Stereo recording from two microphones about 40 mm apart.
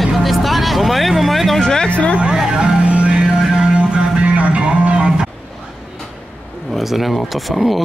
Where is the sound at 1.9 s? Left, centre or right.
Left.